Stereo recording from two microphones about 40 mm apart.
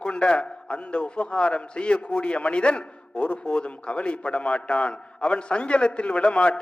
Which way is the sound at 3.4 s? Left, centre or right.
Left.